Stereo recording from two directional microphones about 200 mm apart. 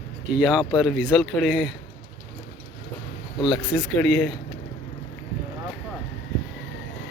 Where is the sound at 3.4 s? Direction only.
Centre (ahead or behind).